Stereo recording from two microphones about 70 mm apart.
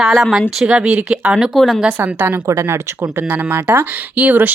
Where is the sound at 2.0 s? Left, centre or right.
Right.